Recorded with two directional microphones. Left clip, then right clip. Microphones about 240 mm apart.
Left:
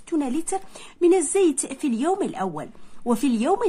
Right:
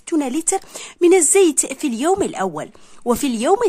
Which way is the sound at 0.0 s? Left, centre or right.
Right.